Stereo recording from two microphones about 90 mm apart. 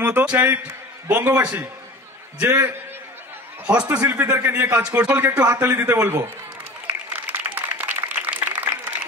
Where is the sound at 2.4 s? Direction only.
25° right (ahead or behind).